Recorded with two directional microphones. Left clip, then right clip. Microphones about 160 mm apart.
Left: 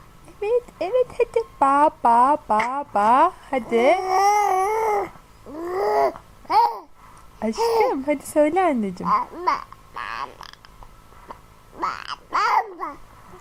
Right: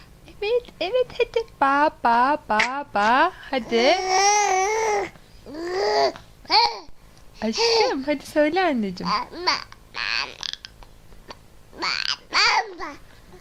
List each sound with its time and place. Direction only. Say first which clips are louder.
0.3 s speech: left 1 dB; 5° right (ahead or behind)
4.2 s baby cry: left 1 dB; centre (ahead or behind)
4.6 s a sound: left 1 dB; 20° right (ahead or behind)
5.5 s babbling: left 1 dB; 20° right (ahead or behind)
6.6 s babbling: left 2 dB; centre (ahead or behind)
7.3 s speech: even; centre (ahead or behind)
9.5 s babbling: even; centre (ahead or behind)
11.9 s babbling: right 4 dB; centre (ahead or behind)
12.7 s babbling: left 3 dB; 20° right (ahead or behind)